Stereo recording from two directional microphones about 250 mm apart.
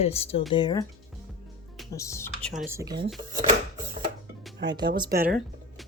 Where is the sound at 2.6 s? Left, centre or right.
Centre.